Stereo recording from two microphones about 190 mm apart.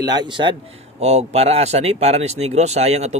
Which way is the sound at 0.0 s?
20° right (ahead or behind).